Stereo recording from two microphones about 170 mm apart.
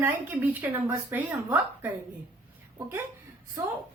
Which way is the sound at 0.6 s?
10° right (ahead or behind).